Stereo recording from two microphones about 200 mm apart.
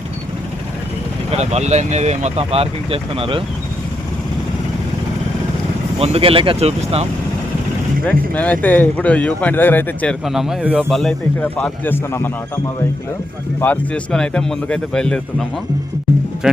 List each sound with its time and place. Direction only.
1.3 s speech: 35° right (ahead or behind)
6.0 s speech: 30° right (ahead or behind)
8.0 s speech: 5° left (ahead or behind)
13.6 s a man's voice: 5° left (ahead or behind)